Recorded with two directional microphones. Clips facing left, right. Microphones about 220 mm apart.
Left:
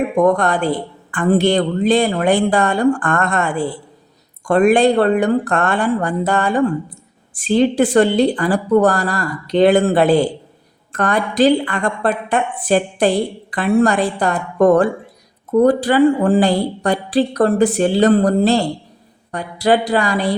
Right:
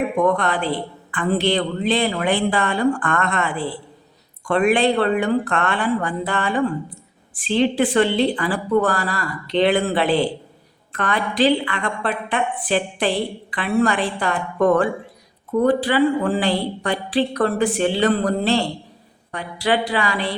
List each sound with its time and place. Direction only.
0.2 s a woman's voice: 45° left (ahead or behind)